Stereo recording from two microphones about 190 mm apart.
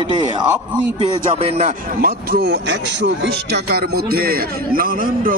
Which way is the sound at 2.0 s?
55° right (ahead or behind).